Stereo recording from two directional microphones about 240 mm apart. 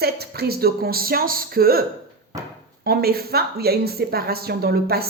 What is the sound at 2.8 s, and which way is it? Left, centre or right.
A woman's voice, right.